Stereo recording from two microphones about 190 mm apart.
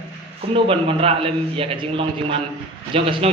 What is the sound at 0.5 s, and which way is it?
A man's voice, 30° right (ahead or behind).